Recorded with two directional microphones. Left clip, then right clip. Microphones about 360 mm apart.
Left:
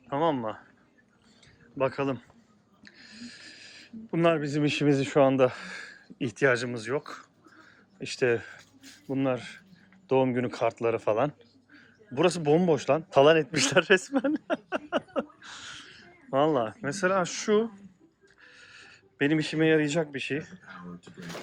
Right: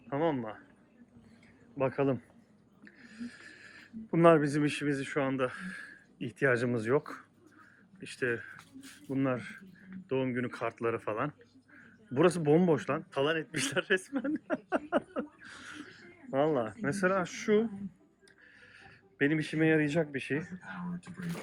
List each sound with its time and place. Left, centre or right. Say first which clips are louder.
0.1 s speech: left 5 dB; centre
1.8 s speech: left 2 dB; centre